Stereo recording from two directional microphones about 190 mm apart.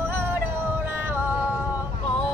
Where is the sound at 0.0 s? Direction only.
10° right (ahead or behind).